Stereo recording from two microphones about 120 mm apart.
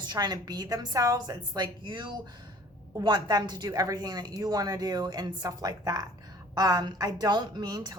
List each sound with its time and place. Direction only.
0.0 s a woman's voice: 35° right (ahead or behind)